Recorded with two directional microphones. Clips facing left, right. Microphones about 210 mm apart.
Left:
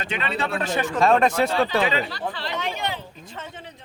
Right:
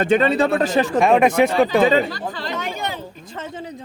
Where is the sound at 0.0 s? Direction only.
45° right (ahead or behind).